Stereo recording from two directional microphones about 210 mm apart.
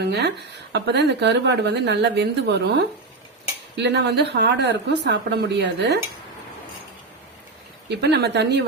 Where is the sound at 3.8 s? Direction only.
55° right (ahead or behind).